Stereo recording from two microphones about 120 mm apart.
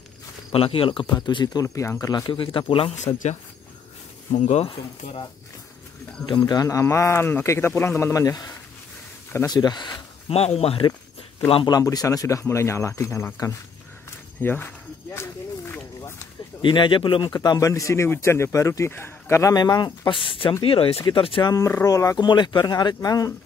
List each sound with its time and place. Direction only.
0.5 s speech: 50° left (ahead or behind); by 2.3 s 30° left (ahead or behind)
2.3 s speech: 45° left (ahead or behind)
4.3 s speech: 80° left
6.4 s a man's voice: 30° left (ahead or behind)
10.3 s speech: 60° left (ahead or behind)
11.6 s a man's voice: 35° left (ahead or behind); by 14.7 s 20° left (ahead or behind)
15.1 s a sound: 20° left (ahead or behind)
16.6 s a man's voice: 40° left (ahead or behind); by 19.5 s 20° left (ahead or behind)
19.5 s speech: 35° left (ahead or behind)
21.5 s speech: 25° left (ahead or behind)